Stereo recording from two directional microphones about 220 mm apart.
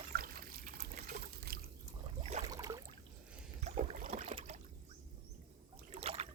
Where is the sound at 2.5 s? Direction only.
15° right (ahead or behind).